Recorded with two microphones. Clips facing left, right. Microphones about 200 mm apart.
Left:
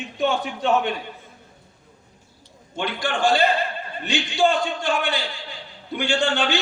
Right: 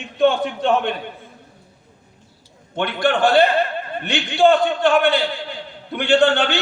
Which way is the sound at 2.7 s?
60° right (ahead or behind).